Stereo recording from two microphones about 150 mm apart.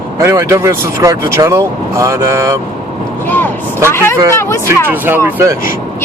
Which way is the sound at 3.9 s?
15° left (ahead or behind).